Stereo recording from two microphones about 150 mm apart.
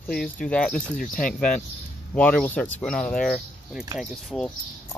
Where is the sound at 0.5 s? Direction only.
5° left (ahead or behind).